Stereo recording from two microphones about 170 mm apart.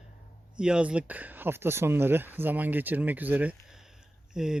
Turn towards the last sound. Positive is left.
turn(degrees=-5)  # may be behind; listen again after turning